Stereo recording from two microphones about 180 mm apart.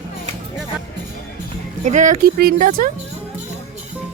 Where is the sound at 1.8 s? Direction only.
45° right (ahead or behind).